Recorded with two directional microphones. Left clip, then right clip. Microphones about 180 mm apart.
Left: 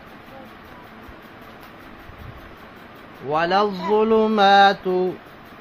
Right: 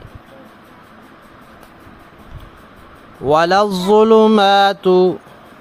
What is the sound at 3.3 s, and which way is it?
Mantra, 70° right (ahead or behind).